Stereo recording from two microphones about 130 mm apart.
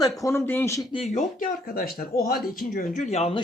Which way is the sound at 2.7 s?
90° left.